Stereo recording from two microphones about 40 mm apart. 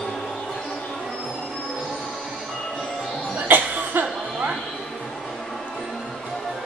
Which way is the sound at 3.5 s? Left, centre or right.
Right.